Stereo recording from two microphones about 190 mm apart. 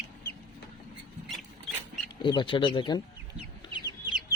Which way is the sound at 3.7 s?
20° left (ahead or behind).